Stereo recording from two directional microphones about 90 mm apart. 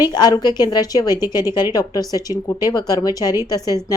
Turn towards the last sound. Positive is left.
turn(degrees=45)  # may be behind; listen again after turning